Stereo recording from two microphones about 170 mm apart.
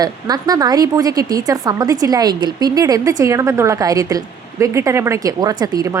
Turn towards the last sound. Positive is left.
turn(degrees=-20)  # may be behind; listen again after turning